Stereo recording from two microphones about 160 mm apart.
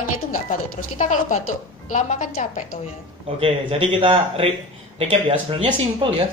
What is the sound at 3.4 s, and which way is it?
Speech, 35° right (ahead or behind).